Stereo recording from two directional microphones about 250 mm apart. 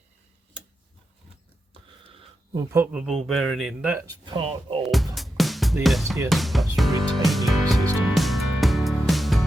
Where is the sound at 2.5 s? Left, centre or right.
Centre.